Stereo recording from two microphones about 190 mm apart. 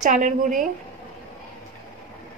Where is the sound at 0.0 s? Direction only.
40° right (ahead or behind).